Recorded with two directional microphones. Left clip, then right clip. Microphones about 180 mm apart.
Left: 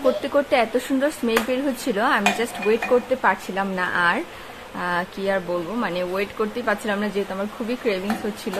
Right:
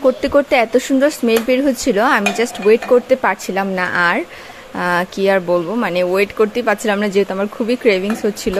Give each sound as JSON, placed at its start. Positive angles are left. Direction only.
{"t": 0.2, "sound": "speech", "side_deg": -40}